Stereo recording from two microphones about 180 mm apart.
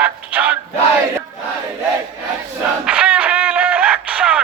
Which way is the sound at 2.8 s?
5° right (ahead or behind).